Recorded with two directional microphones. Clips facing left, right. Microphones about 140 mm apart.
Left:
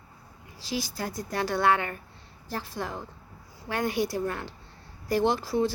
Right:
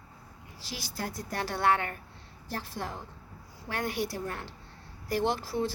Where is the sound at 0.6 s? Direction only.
90° left.